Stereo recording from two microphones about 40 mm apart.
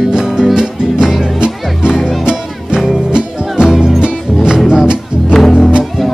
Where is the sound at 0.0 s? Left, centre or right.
Centre.